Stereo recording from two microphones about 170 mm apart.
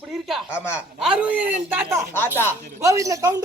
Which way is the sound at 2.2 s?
15° left (ahead or behind).